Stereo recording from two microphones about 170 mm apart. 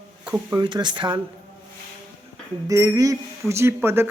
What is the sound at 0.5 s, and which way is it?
Speech, 25° right (ahead or behind).